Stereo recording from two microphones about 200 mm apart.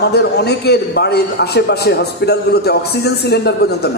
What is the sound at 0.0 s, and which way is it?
A man's voice, 55° left (ahead or behind).